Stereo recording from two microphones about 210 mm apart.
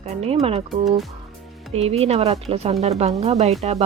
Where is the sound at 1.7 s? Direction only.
30° right (ahead or behind).